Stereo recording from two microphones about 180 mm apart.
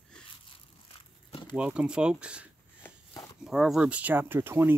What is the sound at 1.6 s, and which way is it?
Speech, 5° right (ahead or behind).